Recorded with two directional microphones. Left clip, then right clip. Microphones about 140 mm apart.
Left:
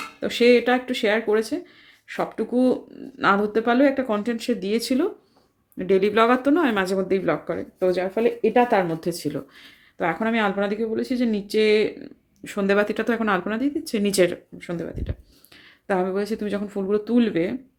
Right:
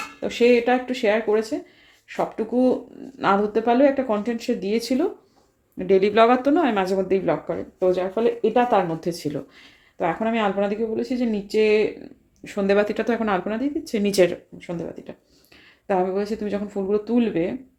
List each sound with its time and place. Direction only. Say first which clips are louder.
0.2 s speech: left 1 dB; 25° left (ahead or behind)